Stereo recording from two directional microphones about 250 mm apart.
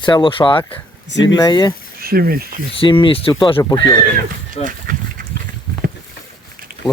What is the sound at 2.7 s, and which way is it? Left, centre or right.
Speech, centre.